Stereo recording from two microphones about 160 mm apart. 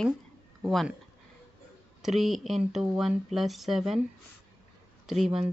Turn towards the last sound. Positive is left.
turn(degrees=0)  # may be behind; listen again after turning